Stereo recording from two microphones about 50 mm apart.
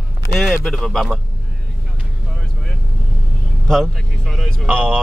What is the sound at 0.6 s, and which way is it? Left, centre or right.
Speech, centre.